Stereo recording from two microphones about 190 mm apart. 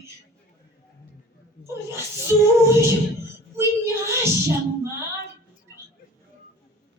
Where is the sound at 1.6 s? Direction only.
15° right (ahead or behind).